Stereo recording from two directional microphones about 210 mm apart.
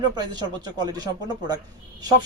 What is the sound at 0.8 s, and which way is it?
Speech, 20° right (ahead or behind).